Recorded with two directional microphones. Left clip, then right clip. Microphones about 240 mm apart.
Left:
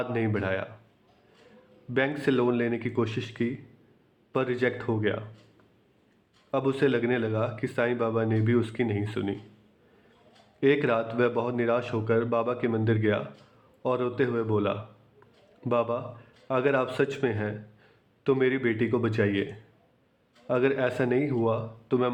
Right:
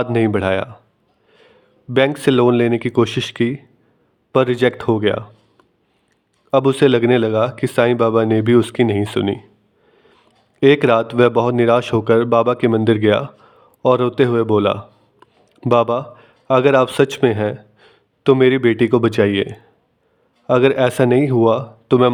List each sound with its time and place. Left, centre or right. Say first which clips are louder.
0.0 s speech: right 12 dB; right
1.9 s speech: right 11 dB; right
6.5 s speech: right 12 dB; right
10.6 s a man's voice: right 12 dB; right